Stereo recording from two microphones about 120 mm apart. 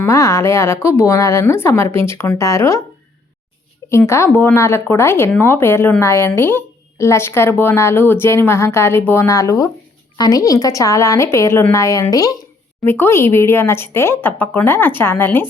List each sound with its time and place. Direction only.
0.0 s a woman's voice: 25° left (ahead or behind)
3.8 s a woman's voice: 25° left (ahead or behind)
12.8 s a woman's voice: 20° left (ahead or behind)